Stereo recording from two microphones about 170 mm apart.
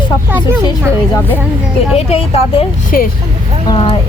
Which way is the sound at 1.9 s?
35° left (ahead or behind).